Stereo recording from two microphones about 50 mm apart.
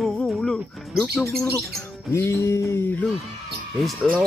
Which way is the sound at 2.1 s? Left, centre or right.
Left.